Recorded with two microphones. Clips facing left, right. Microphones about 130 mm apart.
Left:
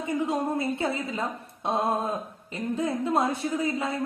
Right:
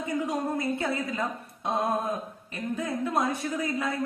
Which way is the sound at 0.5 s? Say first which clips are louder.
Left 1 dB; 25° left (ahead or behind).